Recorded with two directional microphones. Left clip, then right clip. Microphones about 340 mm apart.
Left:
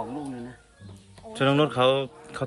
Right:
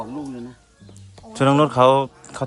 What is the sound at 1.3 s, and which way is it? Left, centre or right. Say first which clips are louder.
Speech: right 6 dB; centre.